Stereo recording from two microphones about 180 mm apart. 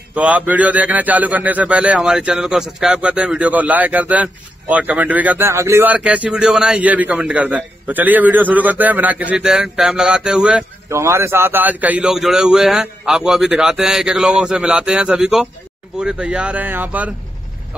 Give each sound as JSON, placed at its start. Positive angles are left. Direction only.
{"t": 0.1, "sound": "a man's voice", "side_deg": -5}